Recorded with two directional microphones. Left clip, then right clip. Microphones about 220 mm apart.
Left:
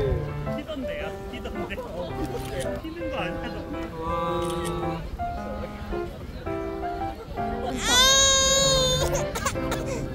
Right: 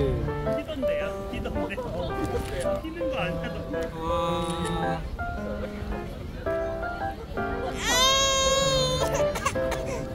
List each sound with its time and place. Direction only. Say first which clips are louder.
0.8 s music: right 7 dB; 15° right (ahead or behind)
3.1 s speech: even; 15° right (ahead or behind)
4.1 s music: left 1 dB; 50° right (ahead or behind)
7.8 s baby cry: left 3 dB; 5° left (ahead or behind)